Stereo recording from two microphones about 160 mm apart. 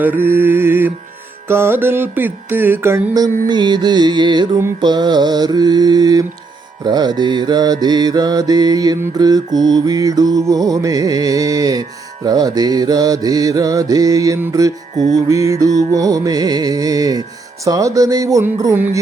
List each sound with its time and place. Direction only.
0.0 s music: 15° right (ahead or behind)
3.2 s mantra: 25° right (ahead or behind)